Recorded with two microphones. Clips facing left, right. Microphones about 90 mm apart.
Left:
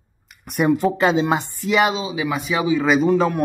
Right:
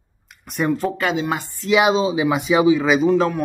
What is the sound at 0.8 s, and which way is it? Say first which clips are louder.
Speech: left 4 dB; 25° left (ahead or behind).